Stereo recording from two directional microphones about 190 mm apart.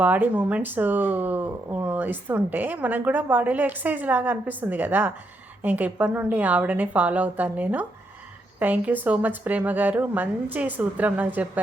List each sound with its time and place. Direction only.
0.0 s speech: 10° right (ahead or behind)